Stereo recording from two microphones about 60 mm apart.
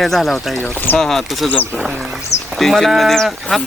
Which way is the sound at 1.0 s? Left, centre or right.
Centre.